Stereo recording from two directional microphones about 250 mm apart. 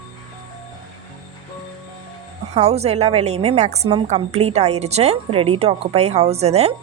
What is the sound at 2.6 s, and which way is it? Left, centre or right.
A woman's voice, right.